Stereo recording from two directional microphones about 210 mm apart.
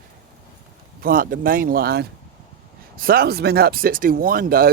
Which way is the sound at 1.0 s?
40° right (ahead or behind).